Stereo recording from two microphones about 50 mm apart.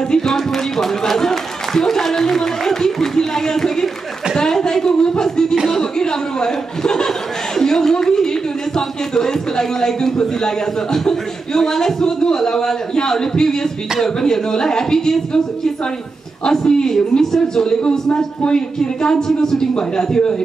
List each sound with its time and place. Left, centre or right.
0.1 s speech: centre